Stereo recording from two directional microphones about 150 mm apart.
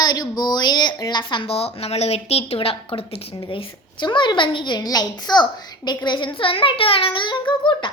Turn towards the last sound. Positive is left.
turn(degrees=35)  # may be behind; listen again after turning